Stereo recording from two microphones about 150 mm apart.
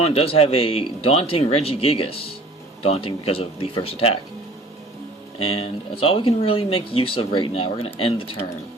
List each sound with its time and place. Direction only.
0.0 s speech: 40° left (ahead or behind)
5.4 s speech: 40° left (ahead or behind)